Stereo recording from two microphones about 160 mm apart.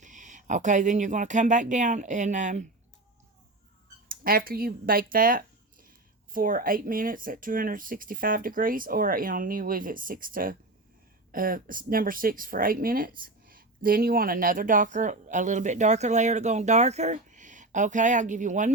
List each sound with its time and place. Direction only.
0.0 s speech: 50° right (ahead or behind)
4.1 s speech: 65° right (ahead or behind)